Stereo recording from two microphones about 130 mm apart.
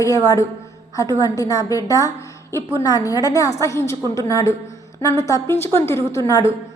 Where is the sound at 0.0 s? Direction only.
25° left (ahead or behind).